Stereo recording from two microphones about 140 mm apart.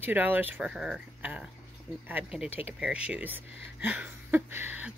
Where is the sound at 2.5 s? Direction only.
45° left (ahead or behind).